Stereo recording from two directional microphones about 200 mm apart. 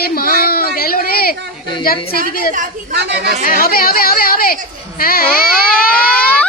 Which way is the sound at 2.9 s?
55° right (ahead or behind).